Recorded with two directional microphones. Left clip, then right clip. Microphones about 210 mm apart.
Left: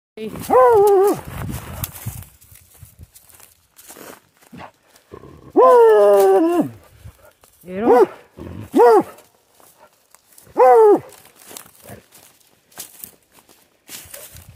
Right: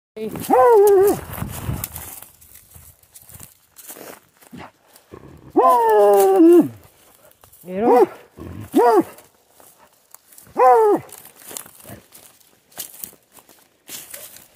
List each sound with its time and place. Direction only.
0.5 s speech: 15° left (ahead or behind)
1.3 s dog: 35° right (ahead or behind)
2.0 s horse: 35° right (ahead or behind)
3.3 s a sound: 45° right (ahead or behind)
5.5 s a sound: 30° left (ahead or behind)
7.6 s speech: 5° right (ahead or behind)
8.7 s speech: 15° left (ahead or behind)
10.5 s dog: 20° left (ahead or behind)
11.4 s crumpling: 40° right (ahead or behind)
12.7 s a sound: 35° right (ahead or behind)